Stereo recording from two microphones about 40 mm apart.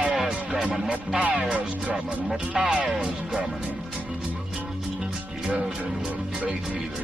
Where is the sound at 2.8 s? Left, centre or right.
Right.